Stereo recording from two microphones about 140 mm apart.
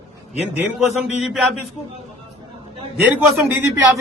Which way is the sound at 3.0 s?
10° right (ahead or behind).